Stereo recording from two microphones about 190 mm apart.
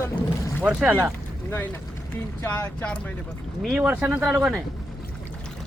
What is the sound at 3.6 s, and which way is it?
Speech, 5° right (ahead or behind).